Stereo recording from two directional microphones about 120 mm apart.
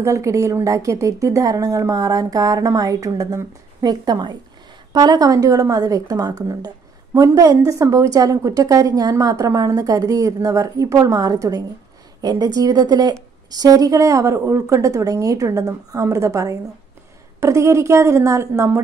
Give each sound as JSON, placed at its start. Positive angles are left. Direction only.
{"t": 0.0, "sound": "a woman's voice", "side_deg": -25}